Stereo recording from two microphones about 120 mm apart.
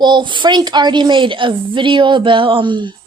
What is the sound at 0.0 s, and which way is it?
A woman's voice, 40° right (ahead or behind).